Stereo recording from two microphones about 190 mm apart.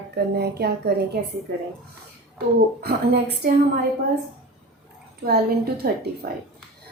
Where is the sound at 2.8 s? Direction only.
55° right (ahead or behind).